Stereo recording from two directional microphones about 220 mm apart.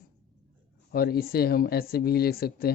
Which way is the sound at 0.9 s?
45° left (ahead or behind).